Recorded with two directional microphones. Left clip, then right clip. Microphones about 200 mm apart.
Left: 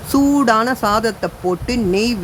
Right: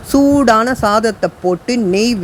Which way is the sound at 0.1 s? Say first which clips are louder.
Right 4 dB; 15° right (ahead or behind).